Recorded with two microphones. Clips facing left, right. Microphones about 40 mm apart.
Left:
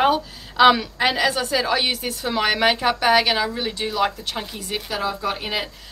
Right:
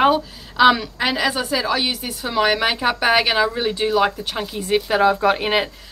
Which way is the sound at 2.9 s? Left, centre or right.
Centre.